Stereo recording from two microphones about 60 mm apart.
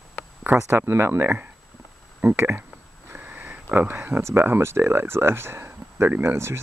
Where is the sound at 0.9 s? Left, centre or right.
Right.